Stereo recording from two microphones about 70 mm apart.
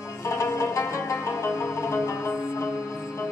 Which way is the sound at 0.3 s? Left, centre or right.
Left.